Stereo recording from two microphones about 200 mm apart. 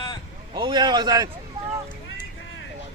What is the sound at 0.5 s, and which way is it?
Speech, 20° right (ahead or behind).